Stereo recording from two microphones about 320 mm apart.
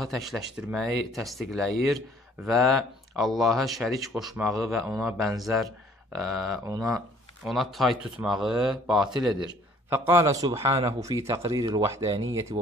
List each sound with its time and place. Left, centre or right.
0.0 s speech: centre
12.2 s speech: right